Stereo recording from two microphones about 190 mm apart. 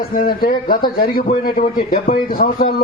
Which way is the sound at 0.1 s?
50° left (ahead or behind).